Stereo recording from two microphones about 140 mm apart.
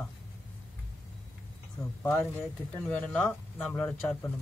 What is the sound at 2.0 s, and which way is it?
Speech, 15° left (ahead or behind).